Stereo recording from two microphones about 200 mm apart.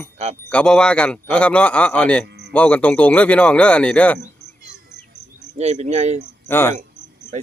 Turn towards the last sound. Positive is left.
turn(degrees=10)  # may be behind; listen again after turning